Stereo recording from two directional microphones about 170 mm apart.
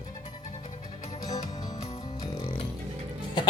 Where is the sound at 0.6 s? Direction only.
45° left (ahead or behind).